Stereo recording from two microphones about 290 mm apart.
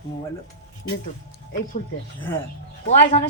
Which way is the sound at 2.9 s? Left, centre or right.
Left.